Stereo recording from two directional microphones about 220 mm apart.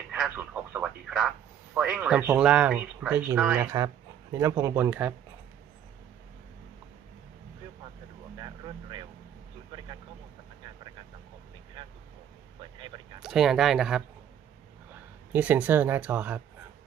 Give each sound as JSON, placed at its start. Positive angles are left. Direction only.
{"t": 0.1, "sound": "telephone", "side_deg": -5}
{"t": 1.7, "sound": "speech", "side_deg": -5}
{"t": 8.4, "sound": "vehicle", "side_deg": -20}
{"t": 11.8, "sound": "vehicle", "side_deg": -20}
{"t": 13.2, "sound": "speech", "side_deg": 0}
{"t": 15.3, "sound": "speech", "side_deg": -5}